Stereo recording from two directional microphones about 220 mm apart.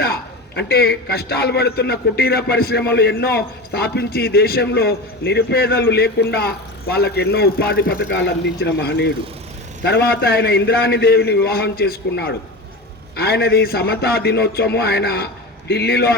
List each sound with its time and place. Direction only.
0.0 s a man's voice: 45° left (ahead or behind)